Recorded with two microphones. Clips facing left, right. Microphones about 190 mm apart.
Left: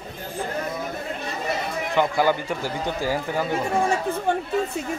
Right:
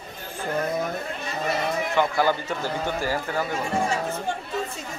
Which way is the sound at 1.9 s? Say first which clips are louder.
Left 3 dB; 15° left (ahead or behind).